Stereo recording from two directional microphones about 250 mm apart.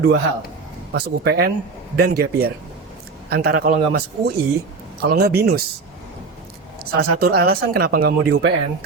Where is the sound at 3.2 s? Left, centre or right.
Right.